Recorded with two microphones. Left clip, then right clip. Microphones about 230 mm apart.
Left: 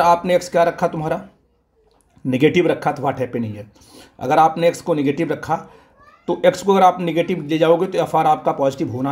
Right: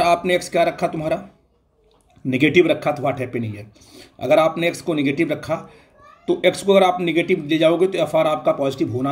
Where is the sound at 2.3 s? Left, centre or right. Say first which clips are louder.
Even; centre.